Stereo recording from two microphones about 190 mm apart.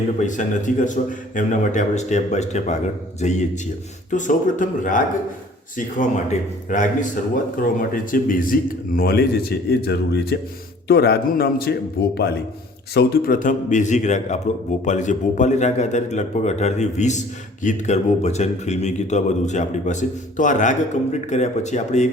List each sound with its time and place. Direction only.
0.2 s a man's voice: 40° left (ahead or behind)
6.7 s a man's voice: 40° left (ahead or behind)